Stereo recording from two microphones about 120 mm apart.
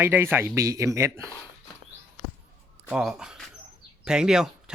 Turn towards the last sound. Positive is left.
turn(degrees=-5)  # may be behind; listen again after turning